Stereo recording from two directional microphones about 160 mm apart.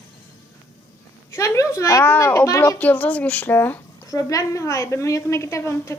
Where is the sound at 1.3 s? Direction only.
20° left (ahead or behind).